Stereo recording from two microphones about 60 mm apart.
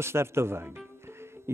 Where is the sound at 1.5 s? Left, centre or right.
Right.